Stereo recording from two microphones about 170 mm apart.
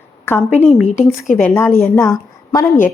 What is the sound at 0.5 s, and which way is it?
Speech, 40° left (ahead or behind).